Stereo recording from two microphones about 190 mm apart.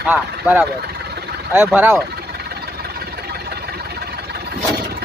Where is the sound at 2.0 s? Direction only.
55° right (ahead or behind).